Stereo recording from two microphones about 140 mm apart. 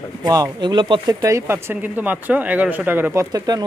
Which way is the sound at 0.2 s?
30° right (ahead or behind).